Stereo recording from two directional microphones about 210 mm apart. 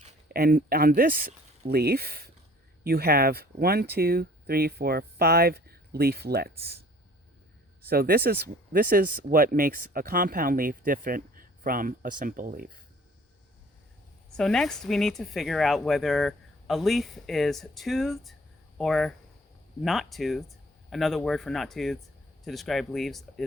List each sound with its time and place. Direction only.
0.3 s speech: 45° right (ahead or behind)
7.8 s speech: 45° right (ahead or behind)
14.3 s speech: 5° left (ahead or behind)